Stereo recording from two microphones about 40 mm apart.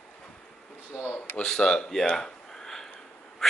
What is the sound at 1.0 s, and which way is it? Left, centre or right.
Speech, left.